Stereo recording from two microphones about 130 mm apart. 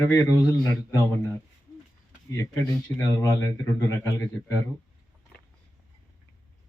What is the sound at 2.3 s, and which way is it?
Speech, 25° left (ahead or behind).